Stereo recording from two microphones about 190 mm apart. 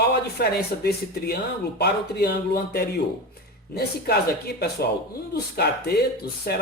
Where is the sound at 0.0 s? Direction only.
55° left (ahead or behind).